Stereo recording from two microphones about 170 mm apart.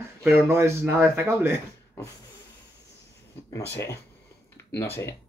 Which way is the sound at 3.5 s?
15° left (ahead or behind).